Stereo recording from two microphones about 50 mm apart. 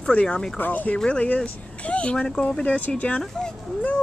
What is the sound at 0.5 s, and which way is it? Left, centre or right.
Speech, left.